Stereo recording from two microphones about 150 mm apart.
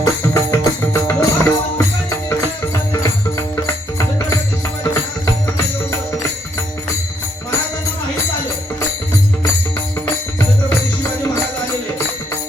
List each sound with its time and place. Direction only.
0.0 s music: 20° left (ahead or behind)